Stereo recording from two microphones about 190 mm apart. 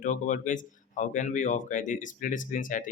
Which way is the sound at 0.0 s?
40° left (ahead or behind).